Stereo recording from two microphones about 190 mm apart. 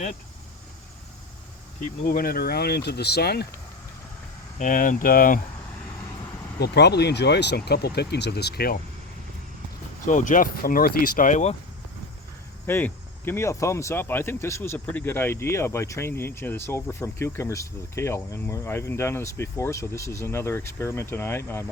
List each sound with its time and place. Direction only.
2.0 s speech: 50° left (ahead or behind)
4.5 s speech: 45° left (ahead or behind)
6.6 s speech: 60° left (ahead or behind)
10.1 s speech: 45° left (ahead or behind)
12.6 s speech: 10° left (ahead or behind)